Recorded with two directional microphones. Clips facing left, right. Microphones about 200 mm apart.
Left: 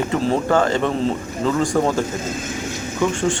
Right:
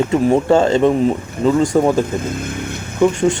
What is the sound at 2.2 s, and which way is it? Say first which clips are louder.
Vehicle: right 3 dB; 60° right (ahead or behind).